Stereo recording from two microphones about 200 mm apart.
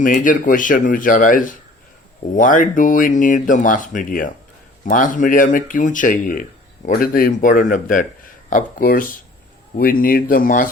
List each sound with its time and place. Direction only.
0.0 s speech: 40° left (ahead or behind)